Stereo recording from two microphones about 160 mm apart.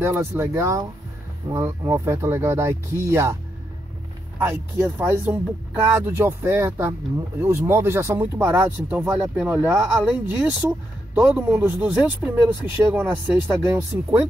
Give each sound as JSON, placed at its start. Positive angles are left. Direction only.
{"t": 0.0, "sound": "speech", "side_deg": -15}
{"t": 4.4, "sound": "speech", "side_deg": -15}